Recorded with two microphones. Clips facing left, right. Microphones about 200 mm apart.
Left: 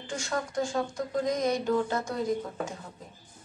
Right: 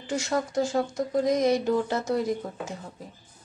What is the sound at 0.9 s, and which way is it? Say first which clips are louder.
Speech: right 5 dB; 75° right (ahead or behind).